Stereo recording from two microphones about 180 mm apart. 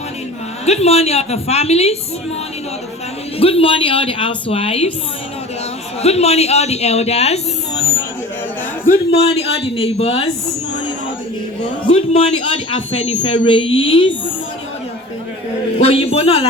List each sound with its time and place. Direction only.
0.6 s speech: 35° left (ahead or behind)
3.3 s speech: 30° left (ahead or behind)
6.0 s speech: 35° left (ahead or behind)
9.1 s speech: 35° left (ahead or behind)
11.9 s speech: 30° left (ahead or behind)
15.8 s speech: 35° left (ahead or behind)